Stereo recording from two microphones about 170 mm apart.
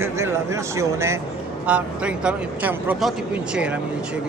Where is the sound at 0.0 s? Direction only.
15° right (ahead or behind).